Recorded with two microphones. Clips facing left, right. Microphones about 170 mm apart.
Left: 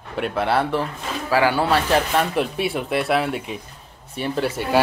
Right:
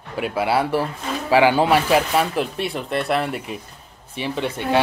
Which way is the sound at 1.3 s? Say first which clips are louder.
Right 3 dB; 20° right (ahead or behind).